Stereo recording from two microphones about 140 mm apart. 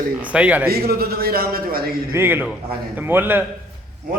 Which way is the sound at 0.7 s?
90° right.